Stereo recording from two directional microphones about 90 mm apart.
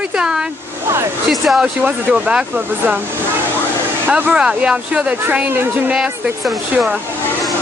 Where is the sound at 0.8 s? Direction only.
30° right (ahead or behind).